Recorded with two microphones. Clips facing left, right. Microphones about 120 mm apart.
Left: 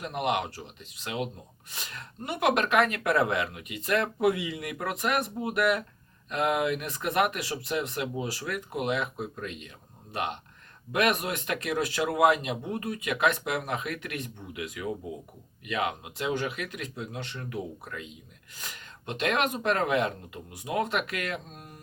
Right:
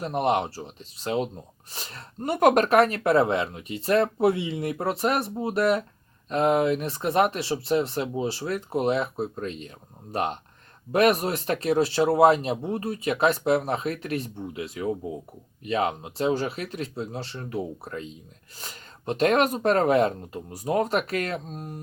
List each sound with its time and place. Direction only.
0.0 s speech: 35° right (ahead or behind)